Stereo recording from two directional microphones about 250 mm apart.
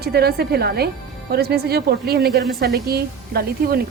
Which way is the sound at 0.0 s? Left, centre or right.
Right.